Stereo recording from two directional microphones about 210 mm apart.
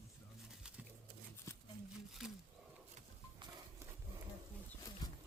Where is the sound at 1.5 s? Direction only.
15° left (ahead or behind).